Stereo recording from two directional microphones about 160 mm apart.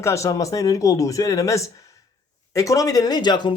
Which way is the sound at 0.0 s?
20° left (ahead or behind).